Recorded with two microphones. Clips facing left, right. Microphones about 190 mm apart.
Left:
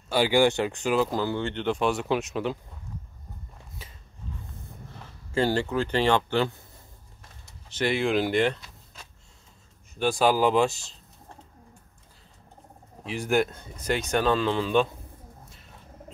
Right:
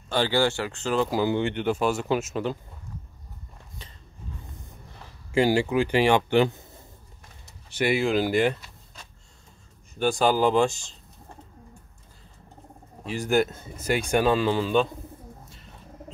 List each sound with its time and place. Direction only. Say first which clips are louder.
0.1 s speech: left 2 dB; 10° left (ahead or behind)
1.1 s speech: right 4 dB; 15° right (ahead or behind)
3.8 s a sound: even; 5° left (ahead or behind)
5.3 s speech: right 3 dB; 10° right (ahead or behind)
7.7 s speech: right 2 dB; 10° right (ahead or behind)
9.9 s speech: even; centre (ahead or behind)
13.0 s speech: right 1 dB; centre (ahead or behind)